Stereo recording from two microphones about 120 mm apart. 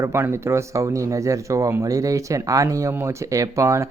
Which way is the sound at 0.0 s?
20° right (ahead or behind).